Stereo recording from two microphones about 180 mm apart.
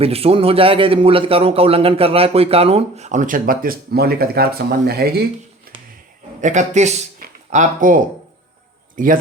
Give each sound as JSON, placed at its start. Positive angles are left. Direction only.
{"t": 0.0, "sound": "a man's voice", "side_deg": -35}
{"t": 5.7, "sound": "music", "side_deg": -55}
{"t": 6.4, "sound": "a man's voice", "side_deg": -40}
{"t": 7.2, "sound": "a sound", "side_deg": -45}
{"t": 9.0, "sound": "speech", "side_deg": -50}